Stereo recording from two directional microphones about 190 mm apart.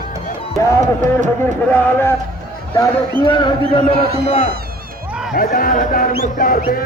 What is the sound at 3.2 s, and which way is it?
Speech, 25° left (ahead or behind).